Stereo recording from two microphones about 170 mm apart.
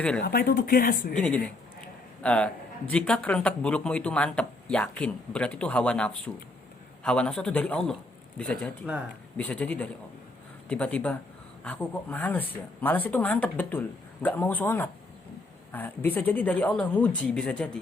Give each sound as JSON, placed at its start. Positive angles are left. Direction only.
{"t": 0.2, "sound": "speech", "side_deg": 65}
{"t": 2.2, "sound": "a man's voice", "side_deg": 5}